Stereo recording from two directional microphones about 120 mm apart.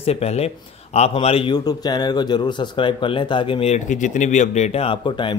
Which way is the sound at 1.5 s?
35° left (ahead or behind).